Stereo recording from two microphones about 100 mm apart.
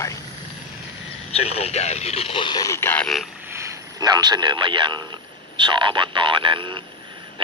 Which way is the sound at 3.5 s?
30° right (ahead or behind).